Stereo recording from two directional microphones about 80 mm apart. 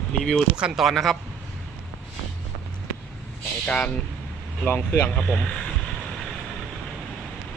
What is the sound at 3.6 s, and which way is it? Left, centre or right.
Speech, centre.